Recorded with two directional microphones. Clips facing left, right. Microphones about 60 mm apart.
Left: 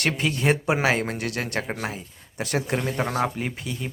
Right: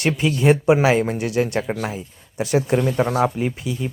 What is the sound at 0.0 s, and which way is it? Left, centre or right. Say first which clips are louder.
Speech: right 5 dB; centre.